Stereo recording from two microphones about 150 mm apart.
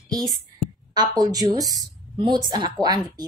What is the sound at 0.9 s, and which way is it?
Speech, 25° right (ahead or behind).